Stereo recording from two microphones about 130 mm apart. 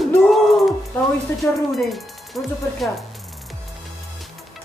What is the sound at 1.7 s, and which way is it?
Speech, centre (ahead or behind).